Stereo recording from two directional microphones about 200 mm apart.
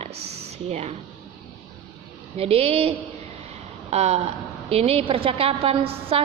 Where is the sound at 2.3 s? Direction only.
30° right (ahead or behind).